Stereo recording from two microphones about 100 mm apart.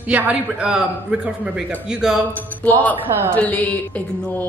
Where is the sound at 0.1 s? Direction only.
15° right (ahead or behind).